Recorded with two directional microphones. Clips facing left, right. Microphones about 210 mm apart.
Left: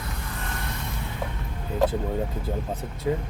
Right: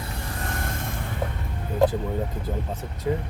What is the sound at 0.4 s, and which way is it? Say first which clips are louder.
Vehicle: right 4 dB; 50° right (ahead or behind).